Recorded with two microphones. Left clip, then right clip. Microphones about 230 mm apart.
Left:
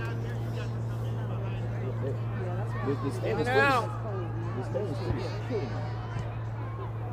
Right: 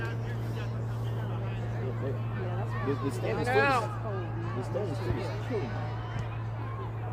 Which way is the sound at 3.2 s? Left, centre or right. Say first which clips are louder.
Left 2 dB; left.